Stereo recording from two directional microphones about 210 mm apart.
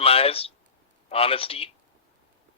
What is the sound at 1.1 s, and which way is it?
Speech, 25° left (ahead or behind).